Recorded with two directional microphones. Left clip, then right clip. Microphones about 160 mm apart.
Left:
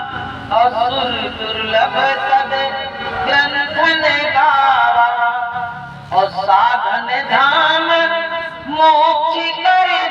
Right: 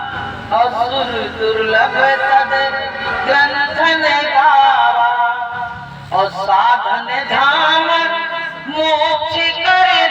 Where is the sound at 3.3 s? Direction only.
25° left (ahead or behind).